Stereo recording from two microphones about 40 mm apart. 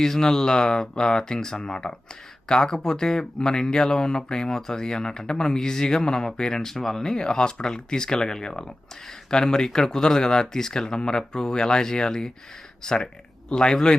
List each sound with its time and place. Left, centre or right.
0.0 s speech: centre